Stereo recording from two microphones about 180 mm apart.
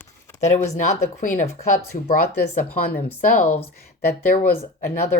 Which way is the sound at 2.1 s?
55° left (ahead or behind).